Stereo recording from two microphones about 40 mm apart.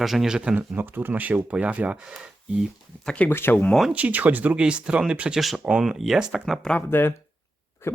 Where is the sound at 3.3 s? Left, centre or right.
Left.